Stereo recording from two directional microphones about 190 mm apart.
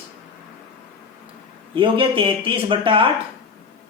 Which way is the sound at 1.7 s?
25° right (ahead or behind).